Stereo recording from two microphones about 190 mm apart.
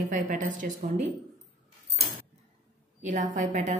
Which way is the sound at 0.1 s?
45° right (ahead or behind).